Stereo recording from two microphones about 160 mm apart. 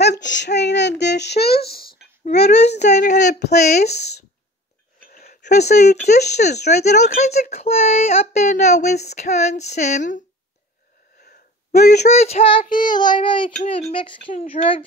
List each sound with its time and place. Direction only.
0.0 s child singing: 90° left
3.0 s a sound: 50° left (ahead or behind)
3.3 s a sound: 90° left
3.5 s speech: 45° left (ahead or behind)
5.2 s a sound: 75° left (ahead or behind)
5.5 s speech: 45° left (ahead or behind)
6.5 s speech: 90° left
7.0 s speech: 45° left (ahead or behind)
11.1 s a sound: 75° left (ahead or behind)
12.0 s child singing: 40° left (ahead or behind)
12.6 s speech: 55° left (ahead or behind)
12.9 s child singing: 30° left (ahead or behind)
14.3 s speech: 55° left (ahead or behind)